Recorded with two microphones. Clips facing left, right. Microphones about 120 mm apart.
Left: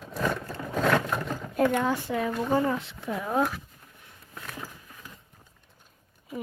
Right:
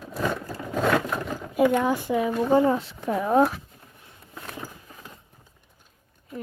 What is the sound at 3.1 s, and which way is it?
Speech, 60° right (ahead or behind).